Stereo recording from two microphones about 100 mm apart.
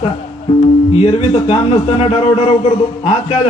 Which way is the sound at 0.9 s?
70° left (ahead or behind).